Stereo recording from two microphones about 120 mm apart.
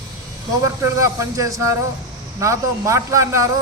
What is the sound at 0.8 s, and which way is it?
A man's voice, 25° right (ahead or behind).